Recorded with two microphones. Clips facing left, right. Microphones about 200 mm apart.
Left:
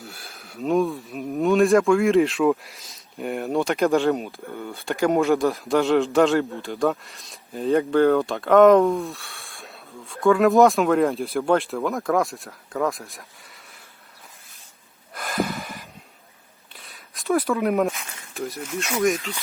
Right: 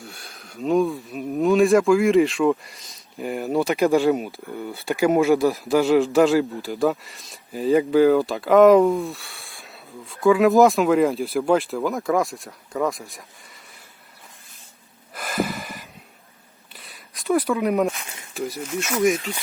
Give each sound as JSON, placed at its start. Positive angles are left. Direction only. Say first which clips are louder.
{"t": 0.0, "sound": "a man's voice", "louder": "even", "side_deg": 0}
{"t": 15.1, "sound": "gasp", "louder": "even", "side_deg": 0}
{"t": 16.7, "sound": "a sound", "louder": "even", "side_deg": 0}